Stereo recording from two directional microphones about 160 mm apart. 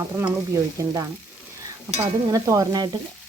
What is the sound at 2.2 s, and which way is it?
Speech, 20° right (ahead or behind).